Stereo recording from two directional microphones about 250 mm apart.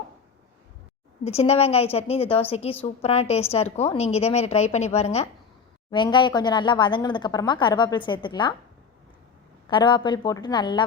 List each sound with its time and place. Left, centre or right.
1.2 s a woman's voice: left
9.6 s speech: centre